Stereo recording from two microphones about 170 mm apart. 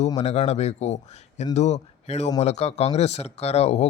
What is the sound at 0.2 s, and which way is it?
Speech, 40° left (ahead or behind).